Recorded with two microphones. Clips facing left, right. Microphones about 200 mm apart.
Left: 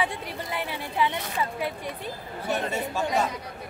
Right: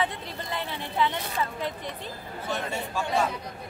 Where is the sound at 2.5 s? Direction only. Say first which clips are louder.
Left 4 dB; 15° left (ahead or behind).